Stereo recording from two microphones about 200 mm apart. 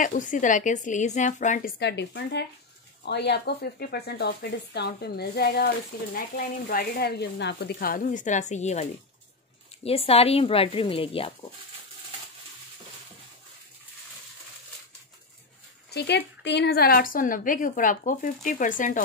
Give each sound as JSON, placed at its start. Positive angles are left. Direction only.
{"t": 0.0, "sound": "a woman's voice", "side_deg": 40}
{"t": 1.8, "sound": "a woman's voice", "side_deg": 60}
{"t": 9.8, "sound": "speech", "side_deg": 30}
{"t": 15.9, "sound": "a woman's voice", "side_deg": 55}